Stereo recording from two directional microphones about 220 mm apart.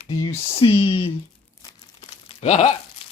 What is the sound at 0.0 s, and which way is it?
Speech, 15° left (ahead or behind).